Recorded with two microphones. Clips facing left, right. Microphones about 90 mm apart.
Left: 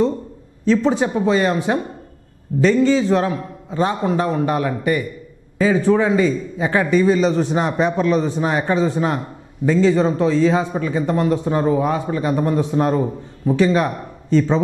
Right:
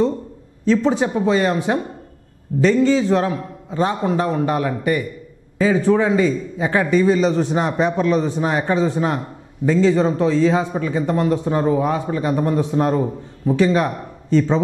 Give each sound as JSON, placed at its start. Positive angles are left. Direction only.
{"t": 0.7, "sound": "a man's voice", "side_deg": 15}